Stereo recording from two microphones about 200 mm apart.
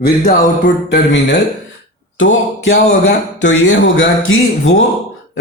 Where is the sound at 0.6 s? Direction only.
55° left (ahead or behind).